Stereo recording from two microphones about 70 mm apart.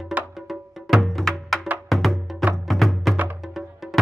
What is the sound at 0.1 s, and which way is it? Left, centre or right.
Music, right.